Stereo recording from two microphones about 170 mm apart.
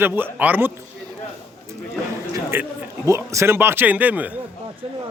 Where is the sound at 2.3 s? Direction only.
15° right (ahead or behind).